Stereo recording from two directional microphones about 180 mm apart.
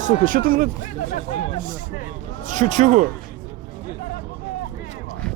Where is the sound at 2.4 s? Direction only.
45° right (ahead or behind).